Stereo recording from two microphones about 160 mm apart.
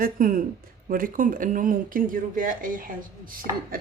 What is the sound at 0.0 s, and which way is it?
Speech, 60° right (ahead or behind).